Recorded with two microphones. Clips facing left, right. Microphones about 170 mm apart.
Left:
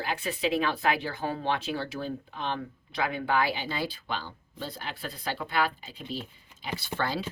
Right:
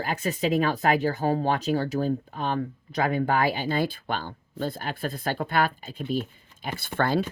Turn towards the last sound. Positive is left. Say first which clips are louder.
# right 6 dB
turn(degrees=-50)  # may be behind; listen again after turning